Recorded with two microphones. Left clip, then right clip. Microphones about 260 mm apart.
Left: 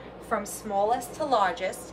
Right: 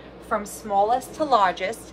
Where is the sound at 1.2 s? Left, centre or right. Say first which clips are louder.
Right 4 dB; centre.